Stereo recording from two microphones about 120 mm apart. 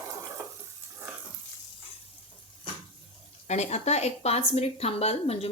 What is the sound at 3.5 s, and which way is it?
A woman's voice, 70° left (ahead or behind).